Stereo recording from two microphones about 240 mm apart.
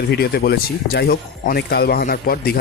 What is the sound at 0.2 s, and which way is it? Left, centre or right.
Speech, left.